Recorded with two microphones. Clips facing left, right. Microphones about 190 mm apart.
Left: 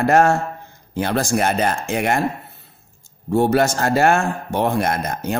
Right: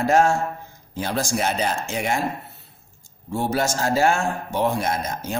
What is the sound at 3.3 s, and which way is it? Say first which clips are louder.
A man's voice: left 7 dB; 60° left (ahead or behind).